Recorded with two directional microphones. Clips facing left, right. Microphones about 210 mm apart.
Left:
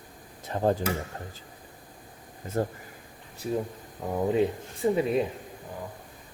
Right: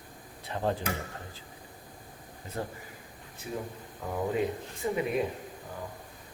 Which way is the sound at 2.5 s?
45° left (ahead or behind).